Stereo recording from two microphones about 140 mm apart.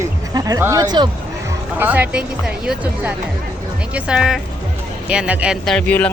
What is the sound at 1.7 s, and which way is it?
Speech, 10° right (ahead or behind).